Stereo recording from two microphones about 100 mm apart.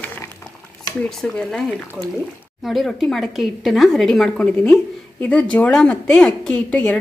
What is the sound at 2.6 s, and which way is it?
A woman's voice, centre (ahead or behind).